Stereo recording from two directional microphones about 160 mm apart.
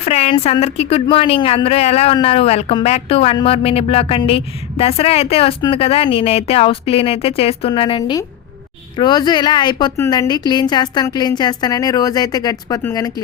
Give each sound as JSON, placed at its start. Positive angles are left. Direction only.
{"t": 0.0, "sound": "a woman's voice", "side_deg": 40}